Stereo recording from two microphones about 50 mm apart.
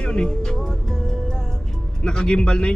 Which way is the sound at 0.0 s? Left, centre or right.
Centre.